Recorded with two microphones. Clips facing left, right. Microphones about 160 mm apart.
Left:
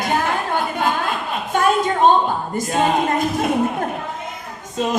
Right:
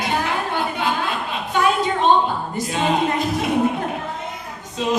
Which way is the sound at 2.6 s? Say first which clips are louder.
Left 5 dB; 45° left (ahead or behind).